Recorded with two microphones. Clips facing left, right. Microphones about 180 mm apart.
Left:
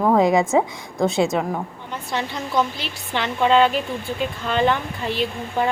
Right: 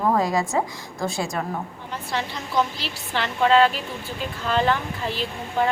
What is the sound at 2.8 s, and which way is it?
Speech, centre (ahead or behind).